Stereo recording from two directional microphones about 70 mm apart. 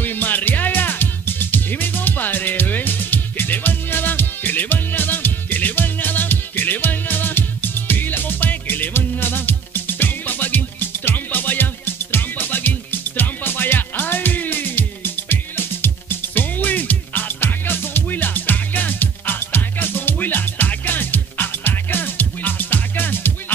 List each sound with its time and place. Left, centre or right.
0.0 s music: left